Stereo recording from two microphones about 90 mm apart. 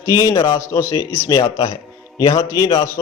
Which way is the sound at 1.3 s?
45° left (ahead or behind).